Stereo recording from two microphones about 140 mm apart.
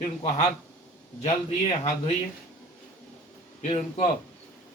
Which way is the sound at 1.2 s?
50° left (ahead or behind).